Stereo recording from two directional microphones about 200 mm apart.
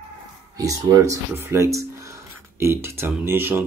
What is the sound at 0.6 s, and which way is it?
Speech, 15° right (ahead or behind).